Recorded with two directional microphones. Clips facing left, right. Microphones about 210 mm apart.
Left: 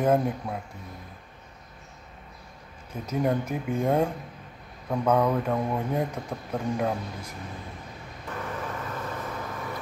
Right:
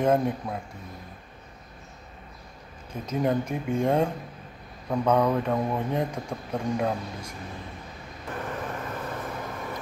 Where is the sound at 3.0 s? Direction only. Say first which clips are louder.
Right 1 dB; 5° left (ahead or behind).